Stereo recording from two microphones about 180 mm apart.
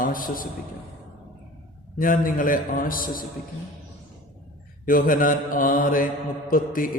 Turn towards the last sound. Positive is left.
turn(degrees=50)  # may be behind; listen again after turning